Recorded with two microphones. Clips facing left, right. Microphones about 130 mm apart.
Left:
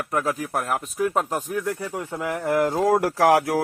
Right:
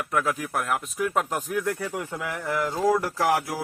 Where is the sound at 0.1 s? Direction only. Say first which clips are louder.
Left 1 dB; 35° left (ahead or behind).